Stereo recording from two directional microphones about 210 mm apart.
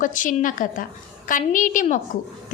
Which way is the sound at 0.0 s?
40° left (ahead or behind).